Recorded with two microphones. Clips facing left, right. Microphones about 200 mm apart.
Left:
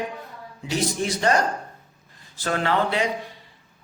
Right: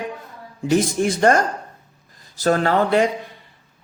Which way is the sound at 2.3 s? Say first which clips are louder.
Right 6 dB; 40° right (ahead or behind).